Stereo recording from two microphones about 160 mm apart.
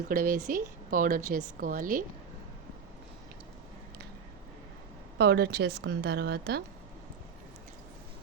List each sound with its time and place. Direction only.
0.1 s speech: 60° right (ahead or behind)
5.1 s a woman's voice: 90° right